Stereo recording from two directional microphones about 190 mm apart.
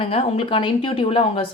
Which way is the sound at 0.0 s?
30° left (ahead or behind).